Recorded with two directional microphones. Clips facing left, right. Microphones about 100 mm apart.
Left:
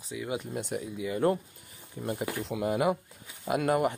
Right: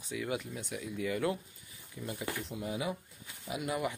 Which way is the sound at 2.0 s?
45° left (ahead or behind).